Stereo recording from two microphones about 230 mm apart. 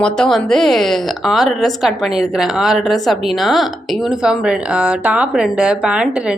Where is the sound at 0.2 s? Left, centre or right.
Centre.